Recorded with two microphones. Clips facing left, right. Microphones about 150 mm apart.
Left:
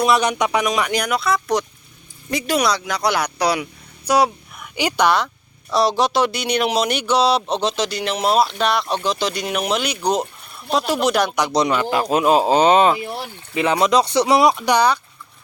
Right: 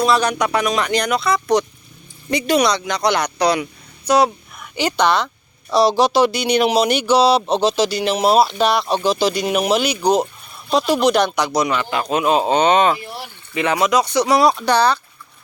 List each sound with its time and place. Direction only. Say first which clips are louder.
0.0 s speech: even; 20° left (ahead or behind)
5.7 s speech: right 3 dB; centre (ahead or behind)
12.5 s speech: even; 35° left (ahead or behind)
13.6 s speech: even; centre (ahead or behind)
13.8 s speech: even; 30° left (ahead or behind); by 14.9 s 15° left (ahead or behind)